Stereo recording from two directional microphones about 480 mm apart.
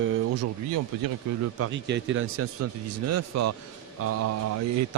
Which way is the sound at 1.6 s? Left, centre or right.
Right.